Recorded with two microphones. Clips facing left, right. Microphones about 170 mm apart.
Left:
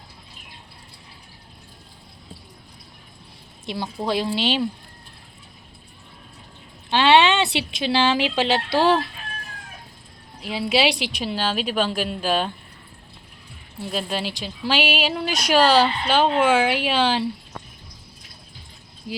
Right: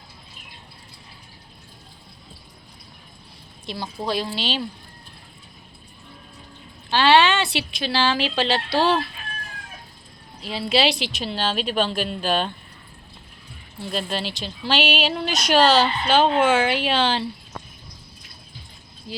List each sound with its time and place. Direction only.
3.7 s a woman's voice: 20° left (ahead or behind)
6.9 s speech: 20° left (ahead or behind)
10.4 s speech: 15° left (ahead or behind)
13.8 s speech: 10° left (ahead or behind)